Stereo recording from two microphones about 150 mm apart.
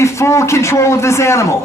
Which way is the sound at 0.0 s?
20° left (ahead or behind).